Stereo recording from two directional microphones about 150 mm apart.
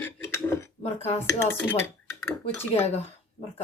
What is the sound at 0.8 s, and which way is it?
Speech, 45° left (ahead or behind).